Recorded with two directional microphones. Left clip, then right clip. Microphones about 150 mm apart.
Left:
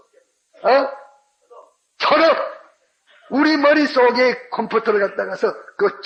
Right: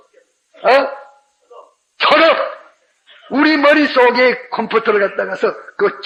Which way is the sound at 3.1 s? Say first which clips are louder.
Right 4 dB; 25° left (ahead or behind).